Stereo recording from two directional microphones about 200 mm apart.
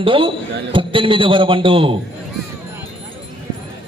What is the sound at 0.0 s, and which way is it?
A man's voice, 25° right (ahead or behind).